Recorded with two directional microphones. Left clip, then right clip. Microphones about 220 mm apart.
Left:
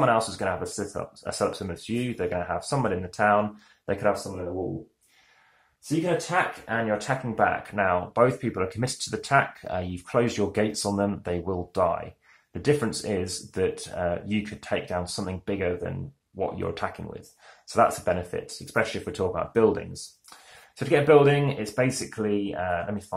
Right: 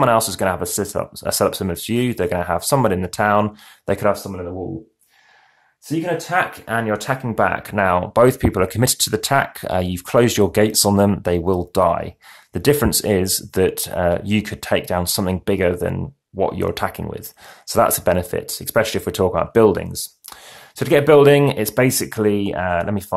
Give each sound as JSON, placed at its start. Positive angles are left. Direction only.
{"t": 0.0, "sound": "speech", "side_deg": -45}
{"t": 6.3, "sound": "speech", "side_deg": -45}